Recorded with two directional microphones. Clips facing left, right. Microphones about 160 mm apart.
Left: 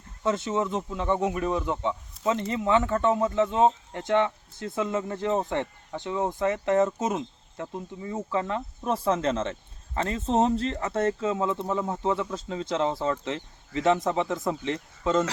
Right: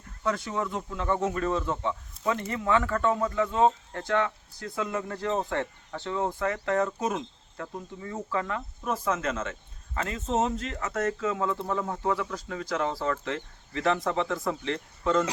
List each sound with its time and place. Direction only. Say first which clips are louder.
0.2 s speech: left 3 dB; 20° left (ahead or behind)